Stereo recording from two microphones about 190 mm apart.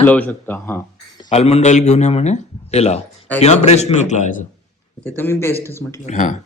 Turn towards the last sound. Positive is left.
turn(degrees=40)  # may be behind; listen again after turning